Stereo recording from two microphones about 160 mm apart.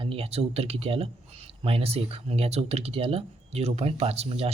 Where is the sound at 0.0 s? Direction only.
35° right (ahead or behind).